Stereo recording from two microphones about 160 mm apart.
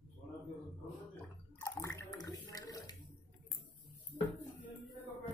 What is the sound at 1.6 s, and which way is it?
Bathtub, 20° left (ahead or behind).